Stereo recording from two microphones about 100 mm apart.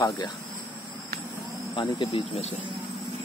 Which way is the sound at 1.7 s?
40° left (ahead or behind).